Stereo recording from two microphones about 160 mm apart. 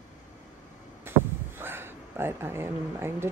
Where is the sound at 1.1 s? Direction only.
15° right (ahead or behind).